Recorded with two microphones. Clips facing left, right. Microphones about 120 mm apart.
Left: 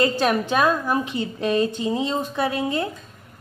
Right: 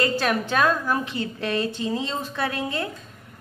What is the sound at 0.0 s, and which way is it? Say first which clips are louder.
A woman's voice: left 3 dB; 20° left (ahead or behind).